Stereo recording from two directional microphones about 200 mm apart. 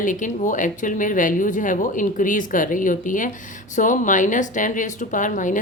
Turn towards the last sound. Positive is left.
turn(degrees=40)  # may be behind; listen again after turning